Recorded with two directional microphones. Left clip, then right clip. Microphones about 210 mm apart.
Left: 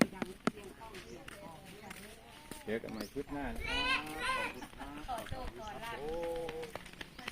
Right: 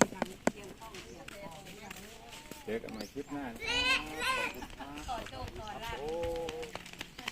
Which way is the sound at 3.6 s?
50° right (ahead or behind).